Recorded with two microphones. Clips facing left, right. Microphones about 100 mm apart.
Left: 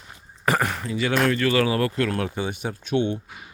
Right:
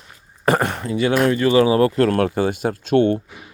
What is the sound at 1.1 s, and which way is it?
Speech, 15° right (ahead or behind).